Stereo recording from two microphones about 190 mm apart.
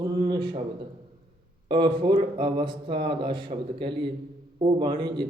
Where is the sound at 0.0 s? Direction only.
20° right (ahead or behind).